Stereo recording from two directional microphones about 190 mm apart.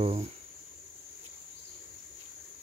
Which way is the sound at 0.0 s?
30° right (ahead or behind).